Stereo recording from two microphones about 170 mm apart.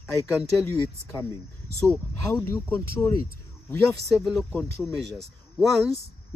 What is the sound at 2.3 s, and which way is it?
Speech, 15° left (ahead or behind).